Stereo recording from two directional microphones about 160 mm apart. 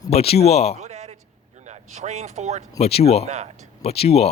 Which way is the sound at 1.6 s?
45° right (ahead or behind).